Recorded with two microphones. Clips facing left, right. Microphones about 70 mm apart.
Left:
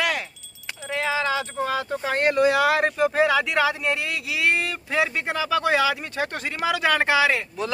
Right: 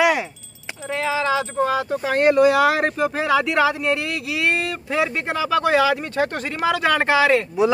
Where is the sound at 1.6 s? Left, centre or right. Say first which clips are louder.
Right 4 dB; right.